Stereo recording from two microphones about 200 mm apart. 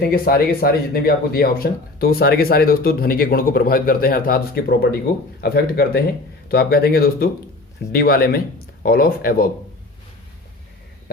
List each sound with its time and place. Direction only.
0.0 s speech: 50° left (ahead or behind)